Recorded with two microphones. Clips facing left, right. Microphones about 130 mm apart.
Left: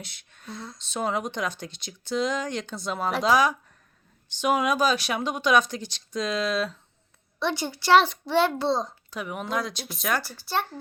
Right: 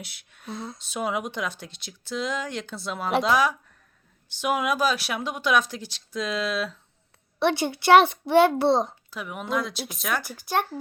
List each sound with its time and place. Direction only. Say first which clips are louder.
0.0 s speech: right 1 dB; 5° right (ahead or behind)
0.4 s a child's voice: right 4 dB; 25° right (ahead or behind)
0.8 s speech: left 1 dB; 10° right (ahead or behind)
7.3 s a woman's voice: right 5 dB; 65° right (ahead or behind)
8.7 s a child's voice: right 4 dB; 20° right (ahead or behind)
9.0 s speech: even; centre (ahead or behind)
10.2 s speech: right 2 dB; 15° right (ahead or behind)